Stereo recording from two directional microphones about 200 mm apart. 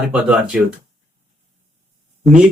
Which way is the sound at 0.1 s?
5° right (ahead or behind).